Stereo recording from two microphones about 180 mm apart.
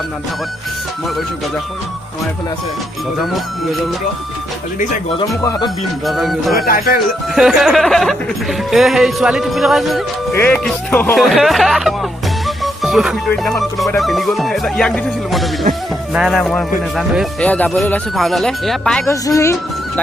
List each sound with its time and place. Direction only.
5.4 s speech: 20° left (ahead or behind)
6.1 s speech: centre (ahead or behind)
6.7 s speech: 55° left (ahead or behind)
7.3 s speech: centre (ahead or behind)
10.3 s speech: 10° left (ahead or behind)
19.0 s speech: 15° left (ahead or behind)